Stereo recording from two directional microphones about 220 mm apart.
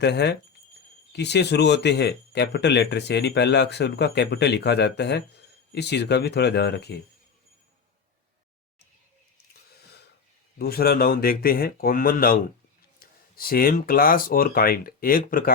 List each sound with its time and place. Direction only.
0.0 s speech: 50° left (ahead or behind)
9.7 s a sound: 45° left (ahead or behind)
10.6 s speech: 45° left (ahead or behind)